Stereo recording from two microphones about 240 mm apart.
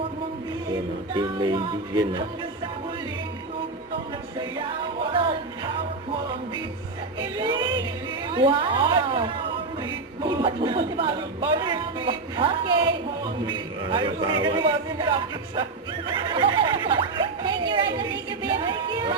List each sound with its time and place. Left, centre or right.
1.1 s a man's voice: centre
5.2 s music: right
7.2 s a sound: centre
8.3 s a man's voice: right
16.0 s neigh: centre